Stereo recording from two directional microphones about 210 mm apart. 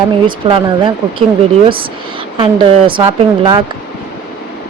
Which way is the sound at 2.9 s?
20° right (ahead or behind).